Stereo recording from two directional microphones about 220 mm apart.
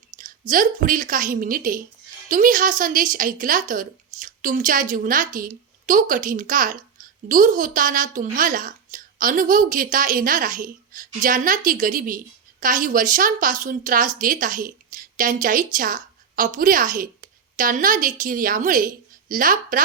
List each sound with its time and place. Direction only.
0.2 s a woman's voice: 35° right (ahead or behind)